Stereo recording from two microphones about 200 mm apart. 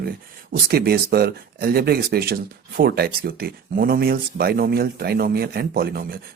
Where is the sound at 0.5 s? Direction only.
50° right (ahead or behind).